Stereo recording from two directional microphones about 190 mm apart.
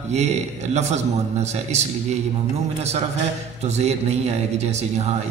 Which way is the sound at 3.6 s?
35° right (ahead or behind).